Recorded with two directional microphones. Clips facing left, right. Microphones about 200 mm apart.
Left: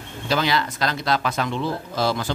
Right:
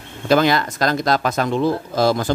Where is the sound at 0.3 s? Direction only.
50° right (ahead or behind).